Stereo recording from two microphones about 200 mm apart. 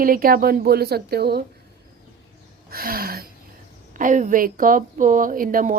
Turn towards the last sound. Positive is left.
turn(degrees=-45)  # may be behind; listen again after turning